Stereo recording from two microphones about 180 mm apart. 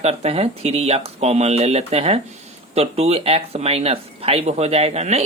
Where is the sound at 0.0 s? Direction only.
35° right (ahead or behind).